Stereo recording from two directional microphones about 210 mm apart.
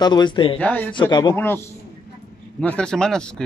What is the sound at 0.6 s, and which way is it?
Speech, 5° left (ahead or behind).